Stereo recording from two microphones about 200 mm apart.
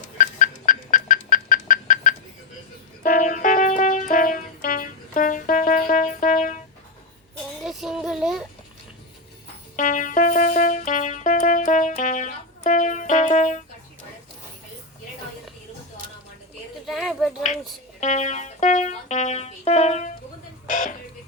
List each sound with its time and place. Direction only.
0.2 s music: 40° left (ahead or behind)
7.6 s child singing: centre (ahead or behind)
9.7 s music: 40° left (ahead or behind)
16.8 s a sound: centre (ahead or behind)
18.0 s music: 35° left (ahead or behind)